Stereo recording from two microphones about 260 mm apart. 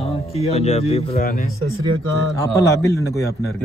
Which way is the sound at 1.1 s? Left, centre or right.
Left.